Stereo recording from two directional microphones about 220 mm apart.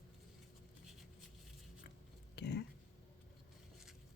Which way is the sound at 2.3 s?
50° left (ahead or behind).